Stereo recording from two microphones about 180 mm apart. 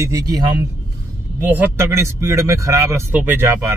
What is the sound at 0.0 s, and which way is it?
Speech, 20° right (ahead or behind).